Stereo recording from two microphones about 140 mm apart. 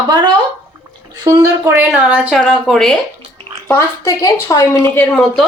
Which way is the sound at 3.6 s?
20° left (ahead or behind).